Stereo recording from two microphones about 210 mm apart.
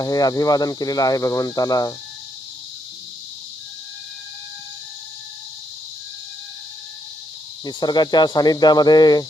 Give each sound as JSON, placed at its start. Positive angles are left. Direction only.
{"t": 0.0, "sound": "speech", "side_deg": 15}
{"t": 7.6, "sound": "speech", "side_deg": 20}